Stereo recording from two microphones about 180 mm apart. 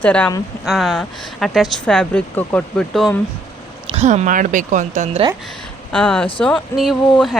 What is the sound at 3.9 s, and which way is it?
Speech, 35° right (ahead or behind).